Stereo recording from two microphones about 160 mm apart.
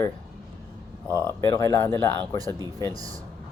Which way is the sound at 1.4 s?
25° left (ahead or behind).